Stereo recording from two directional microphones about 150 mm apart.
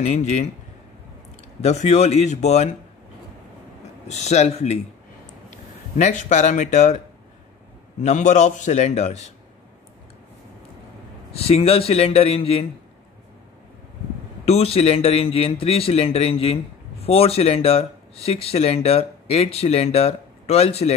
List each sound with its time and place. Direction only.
0.0 s speech: 45° left (ahead or behind)
1.6 s speech: 50° left (ahead or behind)
4.1 s speech: 50° left (ahead or behind)
5.9 s speech: 50° left (ahead or behind)
8.0 s speech: 50° left (ahead or behind)
11.3 s speech: 40° left (ahead or behind)
14.4 s speech: 40° left (ahead or behind)